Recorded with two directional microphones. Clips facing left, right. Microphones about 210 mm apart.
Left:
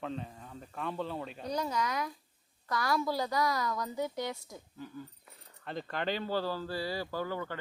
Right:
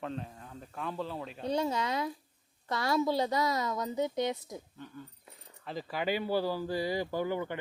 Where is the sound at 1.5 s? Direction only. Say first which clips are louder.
Right 3 dB; 25° right (ahead or behind).